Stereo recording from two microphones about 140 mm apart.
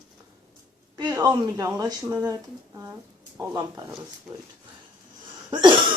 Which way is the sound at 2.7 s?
15° right (ahead or behind).